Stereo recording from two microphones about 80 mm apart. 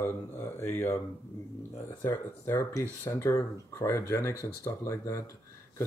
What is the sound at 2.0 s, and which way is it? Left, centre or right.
Speech, left.